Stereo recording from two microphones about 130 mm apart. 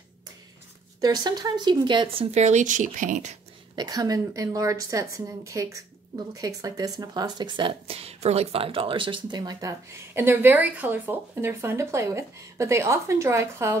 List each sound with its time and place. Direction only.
1.0 s speech: 30° right (ahead or behind)
2.4 s speech: 70° right (ahead or behind)
3.7 s a woman's voice: 30° right (ahead or behind)